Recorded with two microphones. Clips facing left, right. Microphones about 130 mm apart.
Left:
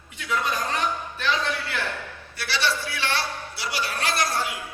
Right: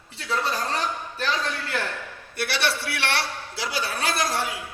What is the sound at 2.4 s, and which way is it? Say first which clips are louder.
Speech: even; 60° right (ahead or behind).